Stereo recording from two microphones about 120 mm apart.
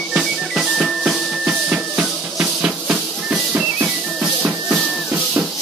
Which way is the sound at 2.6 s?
10° right (ahead or behind).